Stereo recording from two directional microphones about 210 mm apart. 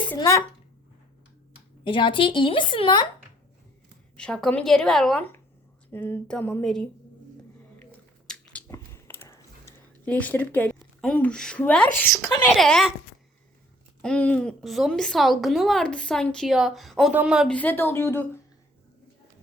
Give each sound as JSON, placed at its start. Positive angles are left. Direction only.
{"t": 0.2, "sound": "speech", "side_deg": 15}
{"t": 1.8, "sound": "a woman's voice", "side_deg": 25}
{"t": 4.2, "sound": "a woman's voice", "side_deg": 5}
{"t": 8.3, "sound": "chewing", "side_deg": 10}
{"t": 11.0, "sound": "a woman's voice", "side_deg": 5}
{"t": 14.0, "sound": "a woman's voice", "side_deg": 5}